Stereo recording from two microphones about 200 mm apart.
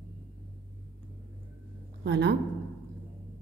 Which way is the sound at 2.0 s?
60° right (ahead or behind).